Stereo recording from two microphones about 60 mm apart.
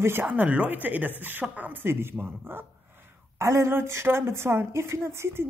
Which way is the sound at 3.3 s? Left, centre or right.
Right.